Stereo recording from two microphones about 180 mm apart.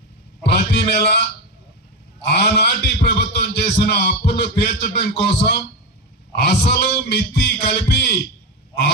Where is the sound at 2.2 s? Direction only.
65° left (ahead or behind).